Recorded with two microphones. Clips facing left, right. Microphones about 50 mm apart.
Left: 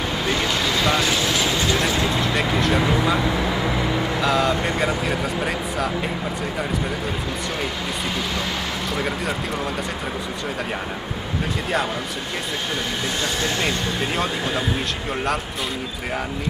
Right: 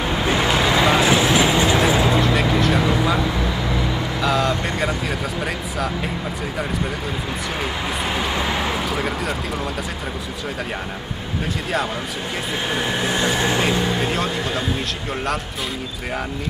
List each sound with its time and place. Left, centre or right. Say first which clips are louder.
0.1 s vehicle: right 4 dB; centre
8.9 s speech: right 1 dB; centre
13.0 s speech: right 5 dB; centre
14.0 s speech: right 1 dB; centre